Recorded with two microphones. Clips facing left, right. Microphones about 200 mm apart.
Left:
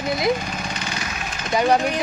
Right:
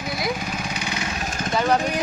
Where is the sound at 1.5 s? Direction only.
15° left (ahead or behind).